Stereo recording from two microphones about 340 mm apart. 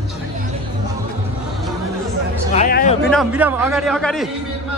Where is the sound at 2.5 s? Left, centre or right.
Left.